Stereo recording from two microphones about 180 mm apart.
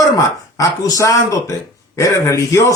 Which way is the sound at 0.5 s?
20° left (ahead or behind).